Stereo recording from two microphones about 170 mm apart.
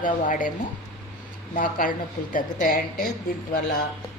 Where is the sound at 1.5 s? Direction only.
50° left (ahead or behind).